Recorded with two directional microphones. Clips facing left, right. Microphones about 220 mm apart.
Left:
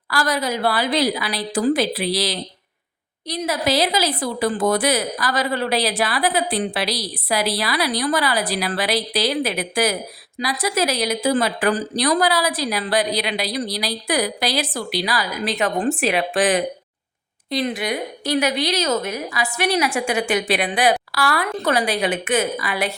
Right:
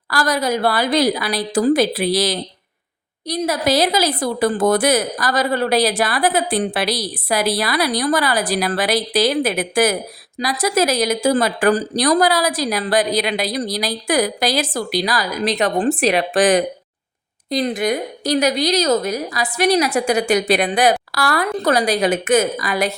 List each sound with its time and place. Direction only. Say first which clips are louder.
0.1 s a woman's voice: right 3 dB; 45° right (ahead or behind)